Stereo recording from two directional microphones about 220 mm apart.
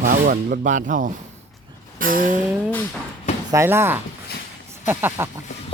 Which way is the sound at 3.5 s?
10° right (ahead or behind).